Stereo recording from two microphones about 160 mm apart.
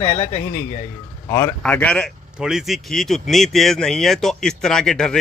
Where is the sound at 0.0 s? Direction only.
40° left (ahead or behind).